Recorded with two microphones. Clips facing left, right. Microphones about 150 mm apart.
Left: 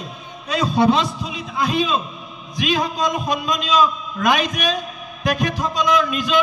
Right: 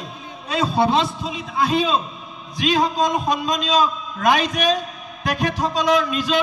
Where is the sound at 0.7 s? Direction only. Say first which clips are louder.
Left 3 dB; 30° right (ahead or behind).